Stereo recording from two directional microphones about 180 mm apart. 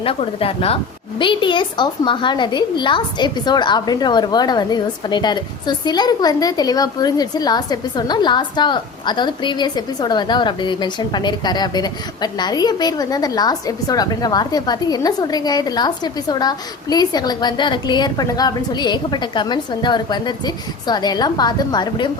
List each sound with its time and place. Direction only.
0.0 s a woman's voice: 30° left (ahead or behind)